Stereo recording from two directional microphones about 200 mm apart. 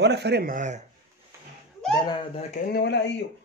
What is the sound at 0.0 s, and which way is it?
Speech, 55° right (ahead or behind).